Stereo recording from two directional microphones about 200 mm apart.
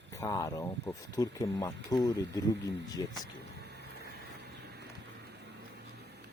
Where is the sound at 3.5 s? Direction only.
55° right (ahead or behind).